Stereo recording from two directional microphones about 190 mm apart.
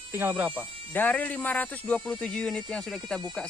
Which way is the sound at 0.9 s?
10° left (ahead or behind).